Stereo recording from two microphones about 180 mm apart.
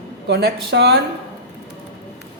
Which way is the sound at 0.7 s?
70° right (ahead or behind).